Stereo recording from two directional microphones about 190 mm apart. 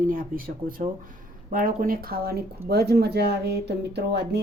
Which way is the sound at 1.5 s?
45° right (ahead or behind).